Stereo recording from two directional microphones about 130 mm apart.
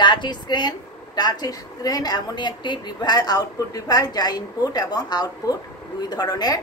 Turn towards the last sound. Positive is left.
turn(degrees=30)  # may be behind; listen again after turning